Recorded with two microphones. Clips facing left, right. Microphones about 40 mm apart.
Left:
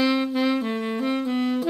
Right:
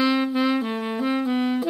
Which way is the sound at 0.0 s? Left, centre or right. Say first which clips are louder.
Right 1 dB; centre.